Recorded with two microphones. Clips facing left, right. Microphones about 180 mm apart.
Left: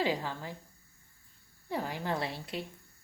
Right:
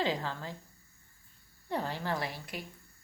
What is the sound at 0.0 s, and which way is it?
Speech, 10° left (ahead or behind).